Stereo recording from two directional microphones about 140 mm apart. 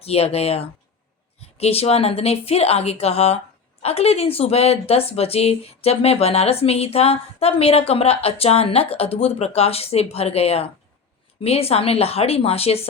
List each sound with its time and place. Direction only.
0.0 s speech: 45° left (ahead or behind)